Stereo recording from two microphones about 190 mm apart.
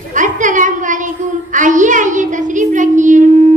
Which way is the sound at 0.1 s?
40° right (ahead or behind).